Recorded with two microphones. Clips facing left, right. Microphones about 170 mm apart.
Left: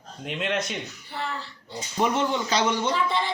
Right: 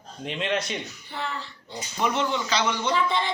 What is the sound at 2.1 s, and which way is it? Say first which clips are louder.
Speech: left 1 dB; 45° left (ahead or behind).